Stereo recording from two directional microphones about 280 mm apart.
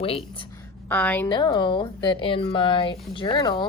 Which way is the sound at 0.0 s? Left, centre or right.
Centre.